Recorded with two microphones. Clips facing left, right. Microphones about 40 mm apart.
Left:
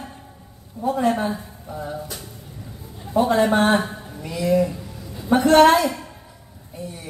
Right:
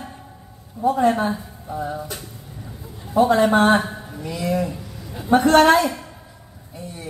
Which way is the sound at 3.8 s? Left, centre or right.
Right.